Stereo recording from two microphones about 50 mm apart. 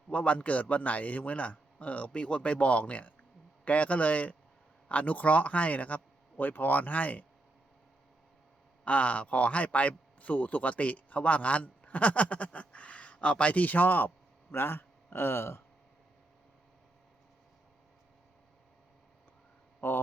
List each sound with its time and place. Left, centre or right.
0.1 s speech: left
8.8 s speech: left
14.5 s speech: left
19.8 s speech: left